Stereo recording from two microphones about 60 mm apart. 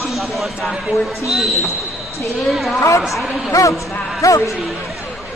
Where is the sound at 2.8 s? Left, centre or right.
Left.